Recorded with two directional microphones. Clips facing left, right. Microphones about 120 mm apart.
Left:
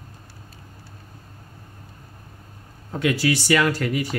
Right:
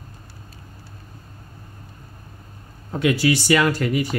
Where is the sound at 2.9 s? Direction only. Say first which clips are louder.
Right 2 dB; 20° right (ahead or behind).